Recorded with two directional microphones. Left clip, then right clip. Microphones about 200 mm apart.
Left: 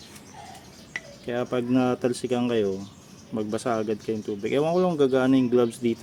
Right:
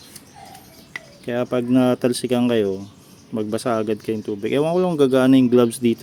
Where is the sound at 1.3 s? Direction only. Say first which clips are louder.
Right 5 dB; 25° right (ahead or behind).